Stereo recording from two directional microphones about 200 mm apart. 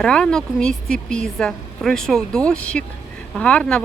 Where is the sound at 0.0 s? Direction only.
5° left (ahead or behind).